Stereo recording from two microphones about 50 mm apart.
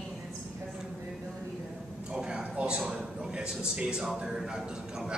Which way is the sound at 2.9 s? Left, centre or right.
Centre.